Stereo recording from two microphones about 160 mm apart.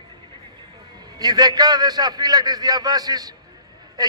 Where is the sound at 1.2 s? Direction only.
25° right (ahead or behind).